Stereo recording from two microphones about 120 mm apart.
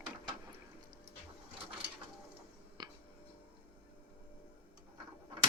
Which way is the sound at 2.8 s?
35° right (ahead or behind).